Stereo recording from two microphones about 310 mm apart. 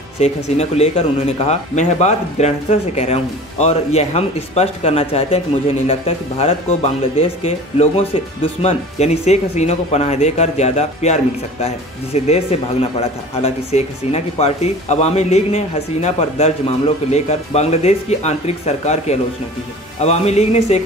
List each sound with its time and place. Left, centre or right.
0.2 s speech: centre